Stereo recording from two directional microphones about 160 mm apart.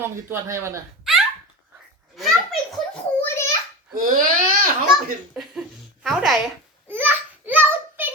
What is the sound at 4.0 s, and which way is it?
Speech, 60° right (ahead or behind).